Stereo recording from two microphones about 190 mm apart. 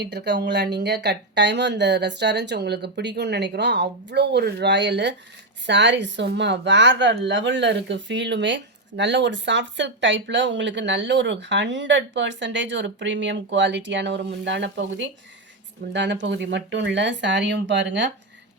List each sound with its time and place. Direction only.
0.0 s speech: 60° right (ahead or behind)